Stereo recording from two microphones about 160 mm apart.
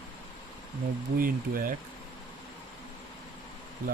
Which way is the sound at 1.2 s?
65° right (ahead or behind).